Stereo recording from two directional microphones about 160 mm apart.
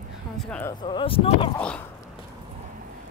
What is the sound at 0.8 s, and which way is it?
Speech, 30° left (ahead or behind).